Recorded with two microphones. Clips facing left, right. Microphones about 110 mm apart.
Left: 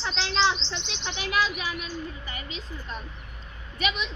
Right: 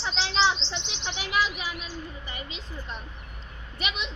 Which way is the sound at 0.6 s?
30° right (ahead or behind).